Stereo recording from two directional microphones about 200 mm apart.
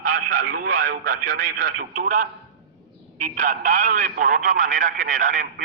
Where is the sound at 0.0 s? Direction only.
45° right (ahead or behind).